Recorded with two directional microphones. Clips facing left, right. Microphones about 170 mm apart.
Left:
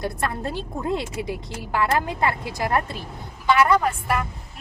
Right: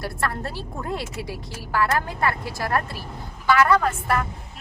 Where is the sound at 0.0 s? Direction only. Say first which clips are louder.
Left 2 dB; 20° left (ahead or behind).